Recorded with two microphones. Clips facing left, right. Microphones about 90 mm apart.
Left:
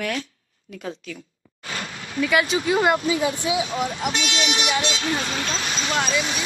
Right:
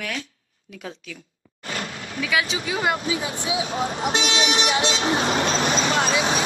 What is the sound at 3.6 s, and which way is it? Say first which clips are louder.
Speech: even; 35° right (ahead or behind).